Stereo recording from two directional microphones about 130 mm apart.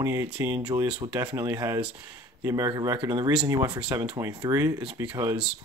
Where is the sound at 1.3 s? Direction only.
25° right (ahead or behind).